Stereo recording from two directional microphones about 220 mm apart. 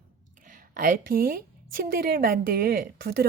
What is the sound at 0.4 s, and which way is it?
A woman's voice, 35° right (ahead or behind).